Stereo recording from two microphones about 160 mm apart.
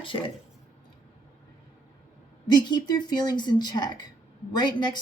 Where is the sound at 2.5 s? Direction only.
25° left (ahead or behind).